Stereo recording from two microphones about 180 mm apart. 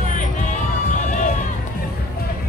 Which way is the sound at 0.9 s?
45° left (ahead or behind).